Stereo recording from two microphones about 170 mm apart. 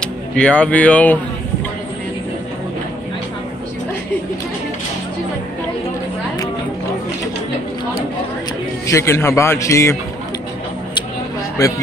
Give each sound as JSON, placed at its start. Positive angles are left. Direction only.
{"t": 0.0, "sound": "speech", "side_deg": 5}
{"t": 8.8, "sound": "a man's voice", "side_deg": 15}
{"t": 11.6, "sound": "a man's voice", "side_deg": 20}